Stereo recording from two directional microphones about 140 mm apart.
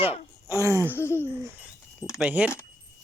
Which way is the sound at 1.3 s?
15° right (ahead or behind).